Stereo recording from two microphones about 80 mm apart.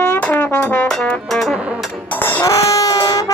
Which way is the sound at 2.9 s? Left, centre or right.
Left.